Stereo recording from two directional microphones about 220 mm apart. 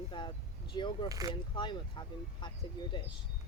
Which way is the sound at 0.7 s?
20° left (ahead or behind).